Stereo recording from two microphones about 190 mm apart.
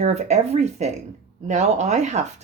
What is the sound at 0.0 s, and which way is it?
Speech, 35° right (ahead or behind).